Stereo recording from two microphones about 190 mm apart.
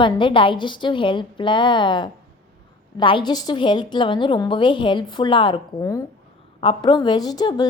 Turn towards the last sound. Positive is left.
turn(degrees=20)  # may be behind; listen again after turning